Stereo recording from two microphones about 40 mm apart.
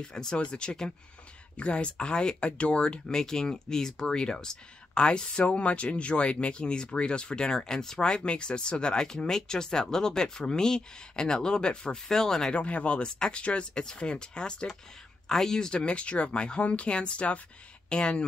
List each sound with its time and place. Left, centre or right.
0.0 s speech: centre
12.5 s speech: left; by 15.8 s centre
15.8 s speech: left